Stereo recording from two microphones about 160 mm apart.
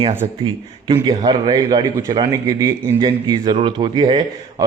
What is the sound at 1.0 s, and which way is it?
A man's voice, 30° right (ahead or behind).